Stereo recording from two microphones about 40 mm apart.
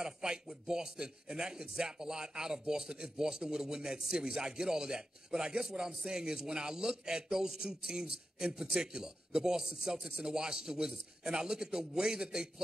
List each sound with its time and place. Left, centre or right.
0.0 s a man's voice: centre